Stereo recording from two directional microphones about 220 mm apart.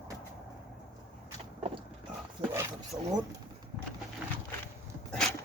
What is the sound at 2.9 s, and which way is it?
Speech, 20° right (ahead or behind).